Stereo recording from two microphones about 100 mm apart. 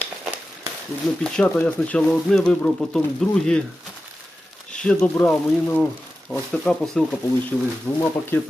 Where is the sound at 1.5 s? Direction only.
15° left (ahead or behind).